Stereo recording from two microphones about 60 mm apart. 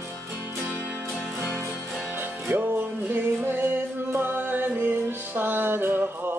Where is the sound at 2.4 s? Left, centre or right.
Right.